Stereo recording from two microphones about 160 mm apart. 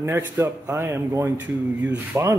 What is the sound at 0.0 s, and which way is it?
Speech, 20° right (ahead or behind).